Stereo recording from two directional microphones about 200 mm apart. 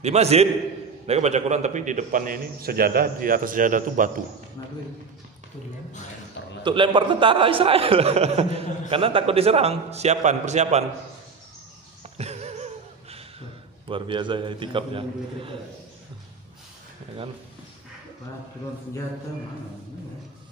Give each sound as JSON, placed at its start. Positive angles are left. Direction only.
{"t": 0.0, "sound": "a man's voice", "side_deg": -30}
{"t": 6.6, "sound": "a man's voice", "side_deg": -25}
{"t": 12.0, "sound": "a sound", "side_deg": -30}
{"t": 13.8, "sound": "a man's voice", "side_deg": -25}